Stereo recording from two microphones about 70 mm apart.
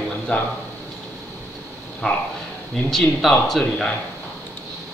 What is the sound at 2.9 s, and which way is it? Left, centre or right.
Speech, centre.